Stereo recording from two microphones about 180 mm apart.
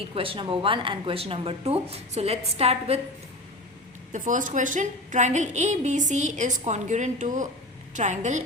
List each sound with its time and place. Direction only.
0.1 s a woman's voice: 30° right (ahead or behind)
4.1 s a woman's voice: 45° right (ahead or behind)